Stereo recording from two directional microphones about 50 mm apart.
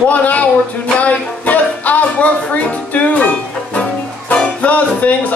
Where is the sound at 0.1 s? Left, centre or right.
Left.